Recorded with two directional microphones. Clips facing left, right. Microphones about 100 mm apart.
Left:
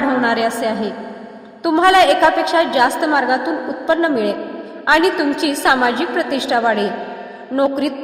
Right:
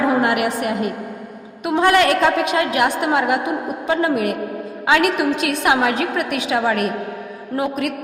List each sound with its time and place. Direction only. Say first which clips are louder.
0.2 s a woman's voice: left 2 dB; 25° left (ahead or behind)